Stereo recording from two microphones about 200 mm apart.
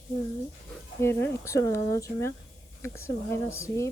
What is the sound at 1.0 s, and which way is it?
Speech, 10° left (ahead or behind).